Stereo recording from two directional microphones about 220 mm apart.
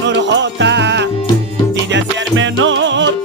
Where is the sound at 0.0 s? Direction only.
55° right (ahead or behind).